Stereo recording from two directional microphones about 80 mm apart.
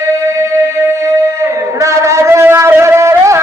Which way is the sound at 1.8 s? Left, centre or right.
Right.